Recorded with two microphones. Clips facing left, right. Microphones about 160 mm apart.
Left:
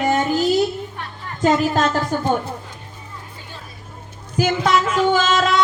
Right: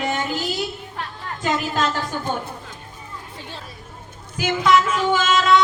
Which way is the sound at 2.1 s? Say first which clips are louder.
Left 6 dB; 45° left (ahead or behind).